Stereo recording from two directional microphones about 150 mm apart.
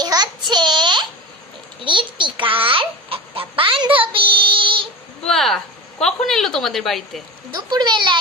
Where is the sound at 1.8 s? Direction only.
35° right (ahead or behind).